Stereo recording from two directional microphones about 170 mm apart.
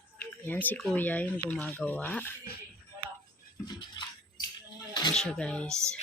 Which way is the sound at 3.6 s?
25° left (ahead or behind).